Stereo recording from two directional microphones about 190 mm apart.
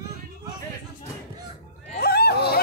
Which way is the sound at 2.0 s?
55° left (ahead or behind).